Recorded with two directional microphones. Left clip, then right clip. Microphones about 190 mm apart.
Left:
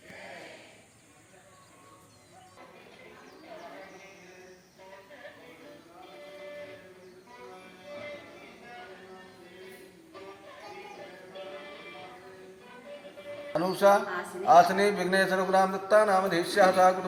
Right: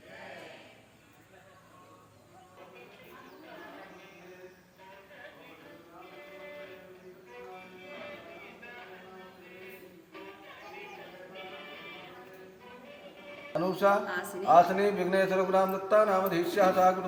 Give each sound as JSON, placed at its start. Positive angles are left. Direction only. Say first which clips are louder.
{"t": 13.5, "sound": "music", "louder": "left 4 dB", "side_deg": 30}
{"t": 14.4, "sound": "speech", "louder": "left 2 dB", "side_deg": 30}